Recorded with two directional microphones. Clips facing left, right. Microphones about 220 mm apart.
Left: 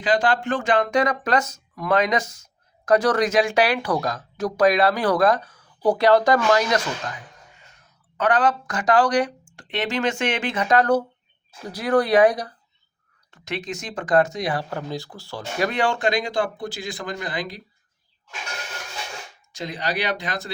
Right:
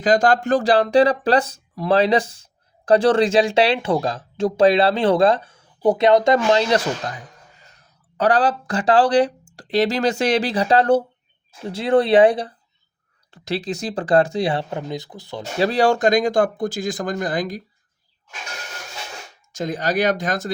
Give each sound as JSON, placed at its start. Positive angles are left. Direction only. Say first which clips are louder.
{"t": 0.0, "sound": "speech", "louder": "right 4 dB", "side_deg": -45}
{"t": 19.5, "sound": "speech", "louder": "right 6 dB", "side_deg": -45}